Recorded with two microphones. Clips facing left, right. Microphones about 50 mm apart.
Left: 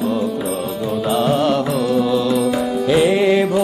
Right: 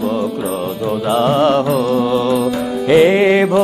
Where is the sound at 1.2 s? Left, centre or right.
Right.